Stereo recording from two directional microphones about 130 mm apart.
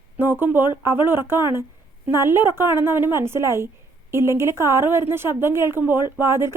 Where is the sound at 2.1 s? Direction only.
20° right (ahead or behind).